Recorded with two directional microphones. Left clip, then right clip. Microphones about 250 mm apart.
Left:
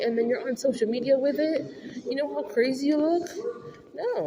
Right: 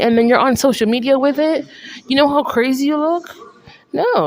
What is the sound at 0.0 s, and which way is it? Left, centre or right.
Speech, right.